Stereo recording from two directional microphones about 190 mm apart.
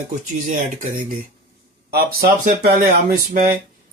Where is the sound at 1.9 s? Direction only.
55° right (ahead or behind).